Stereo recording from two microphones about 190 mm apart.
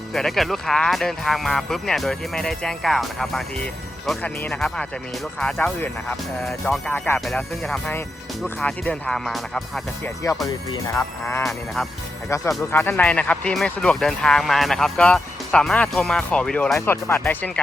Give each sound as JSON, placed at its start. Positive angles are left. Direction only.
{"t": 0.1, "sound": "speech", "side_deg": 0}
{"t": 10.4, "sound": "speech", "side_deg": 15}
{"t": 11.4, "sound": "speech", "side_deg": 0}
{"t": 12.3, "sound": "speech", "side_deg": 15}